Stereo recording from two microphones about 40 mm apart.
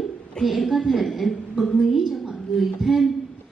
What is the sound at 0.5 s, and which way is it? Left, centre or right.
A woman's voice, centre.